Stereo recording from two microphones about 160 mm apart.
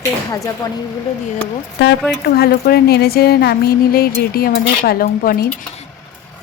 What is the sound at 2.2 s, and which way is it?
Speech, 80° left.